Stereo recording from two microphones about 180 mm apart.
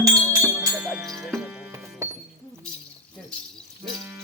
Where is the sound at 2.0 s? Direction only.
15° right (ahead or behind).